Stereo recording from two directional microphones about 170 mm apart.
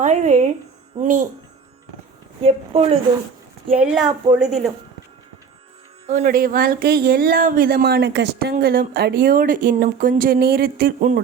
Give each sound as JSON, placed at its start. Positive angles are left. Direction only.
{"t": 0.0, "sound": "speech", "side_deg": -45}
{"t": 2.4, "sound": "a woman's voice", "side_deg": -35}
{"t": 3.8, "sound": "speech", "side_deg": -5}
{"t": 6.2, "sound": "speech", "side_deg": -55}